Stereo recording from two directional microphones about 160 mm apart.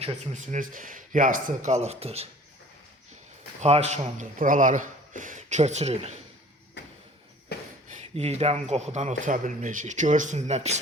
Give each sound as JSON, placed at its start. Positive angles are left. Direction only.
{"t": 0.0, "sound": "speech", "side_deg": -50}
{"t": 3.6, "sound": "speech", "side_deg": -45}
{"t": 6.8, "sound": "a sound", "side_deg": 90}
{"t": 8.1, "sound": "speech", "side_deg": -40}